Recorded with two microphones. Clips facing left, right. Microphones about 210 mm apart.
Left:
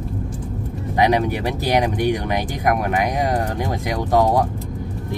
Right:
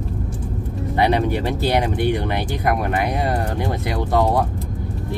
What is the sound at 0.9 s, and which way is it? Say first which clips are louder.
Speech: left 1 dB; 15° left (ahead or behind).